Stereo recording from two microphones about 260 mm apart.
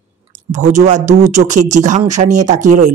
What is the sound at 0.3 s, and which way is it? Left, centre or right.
Speech, right.